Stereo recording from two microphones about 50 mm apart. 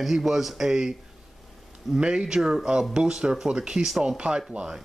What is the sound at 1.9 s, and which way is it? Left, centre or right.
Speech, centre.